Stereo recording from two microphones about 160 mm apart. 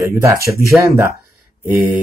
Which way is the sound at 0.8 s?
20° right (ahead or behind).